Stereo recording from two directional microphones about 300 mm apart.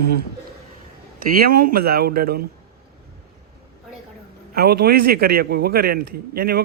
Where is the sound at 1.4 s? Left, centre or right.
Right.